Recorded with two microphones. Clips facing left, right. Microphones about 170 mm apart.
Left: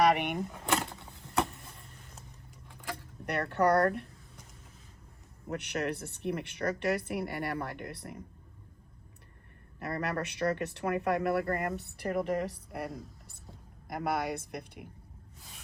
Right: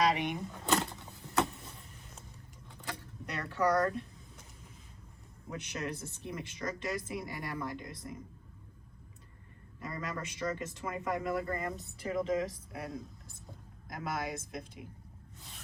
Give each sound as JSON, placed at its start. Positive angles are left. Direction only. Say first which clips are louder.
{"t": 0.0, "sound": "speech", "louder": "left 4 dB", "side_deg": 65}
{"t": 0.5, "sound": "a sound", "louder": "even", "side_deg": 15}
{"t": 3.2, "sound": "speech", "louder": "left 4 dB", "side_deg": 65}
{"t": 5.5, "sound": "speech", "louder": "left 5 dB", "side_deg": 65}
{"t": 9.8, "sound": "speech", "louder": "left 6 dB", "side_deg": 65}